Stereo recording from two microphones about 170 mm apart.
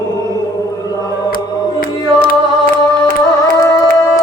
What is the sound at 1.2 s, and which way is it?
Music, 55° left (ahead or behind).